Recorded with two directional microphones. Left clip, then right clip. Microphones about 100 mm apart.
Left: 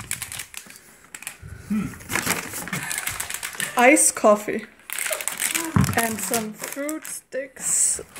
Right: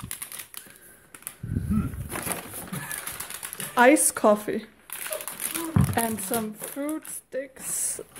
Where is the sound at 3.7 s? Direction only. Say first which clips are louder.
Left 2 dB; 15° right (ahead or behind).